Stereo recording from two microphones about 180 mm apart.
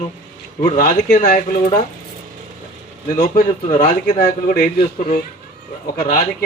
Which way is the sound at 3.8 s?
55° left (ahead or behind).